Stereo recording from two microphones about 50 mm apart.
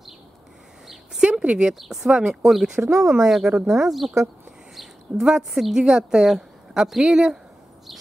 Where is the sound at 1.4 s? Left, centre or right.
Right.